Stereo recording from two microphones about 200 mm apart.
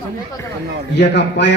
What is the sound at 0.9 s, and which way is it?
Speech, 60° left (ahead or behind).